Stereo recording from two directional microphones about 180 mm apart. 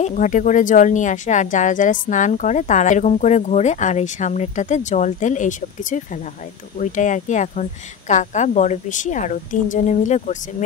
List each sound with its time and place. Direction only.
0.0 s speech: 45° left (ahead or behind)